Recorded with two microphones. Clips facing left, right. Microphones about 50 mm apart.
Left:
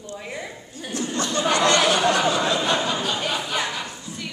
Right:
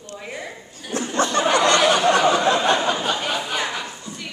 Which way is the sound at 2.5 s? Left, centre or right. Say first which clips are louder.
Right 4 dB; right.